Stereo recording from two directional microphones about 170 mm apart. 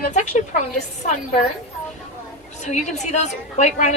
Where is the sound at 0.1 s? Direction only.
45° left (ahead or behind).